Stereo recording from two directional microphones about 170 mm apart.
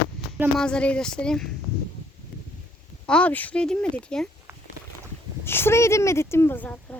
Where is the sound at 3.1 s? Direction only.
5° left (ahead or behind).